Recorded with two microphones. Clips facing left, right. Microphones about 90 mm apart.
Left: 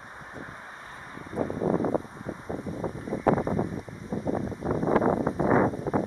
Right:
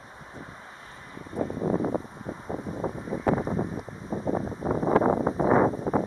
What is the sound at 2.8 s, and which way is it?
Wind noise, 40° right (ahead or behind).